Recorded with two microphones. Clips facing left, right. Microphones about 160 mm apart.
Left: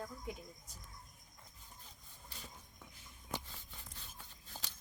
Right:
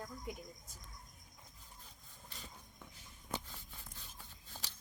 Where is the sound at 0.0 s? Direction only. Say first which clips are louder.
Left 1 dB; centre (ahead or behind).